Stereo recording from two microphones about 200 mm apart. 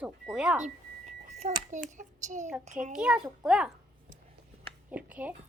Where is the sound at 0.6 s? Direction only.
35° right (ahead or behind).